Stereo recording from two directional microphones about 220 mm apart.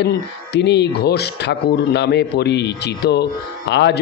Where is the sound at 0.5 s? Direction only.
50° left (ahead or behind).